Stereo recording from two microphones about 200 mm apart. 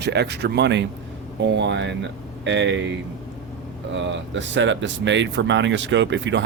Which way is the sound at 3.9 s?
65° right (ahead or behind).